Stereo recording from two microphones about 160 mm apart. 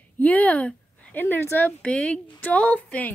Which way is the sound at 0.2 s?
10° left (ahead or behind).